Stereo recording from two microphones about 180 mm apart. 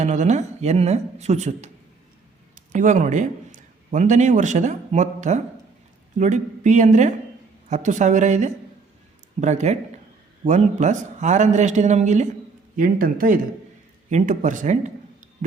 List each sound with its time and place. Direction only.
0.0 s a man's voice: 40° right (ahead or behind)
2.7 s a man's voice: 45° right (ahead or behind)
12.7 s speech: 50° right (ahead or behind)